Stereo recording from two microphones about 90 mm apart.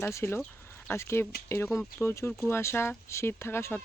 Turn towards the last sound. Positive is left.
turn(degrees=25)  # may be behind; listen again after turning